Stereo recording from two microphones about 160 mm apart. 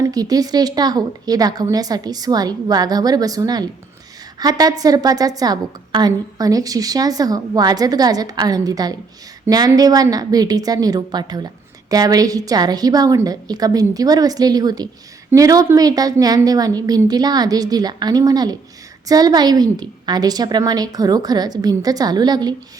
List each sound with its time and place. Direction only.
0.0 s a woman's voice: 25° right (ahead or behind)